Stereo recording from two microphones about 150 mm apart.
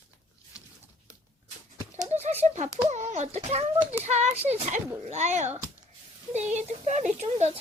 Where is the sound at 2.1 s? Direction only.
45° right (ahead or behind).